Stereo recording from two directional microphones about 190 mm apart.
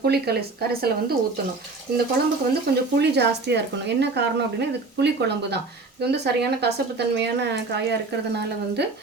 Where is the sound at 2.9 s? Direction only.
60° right (ahead or behind).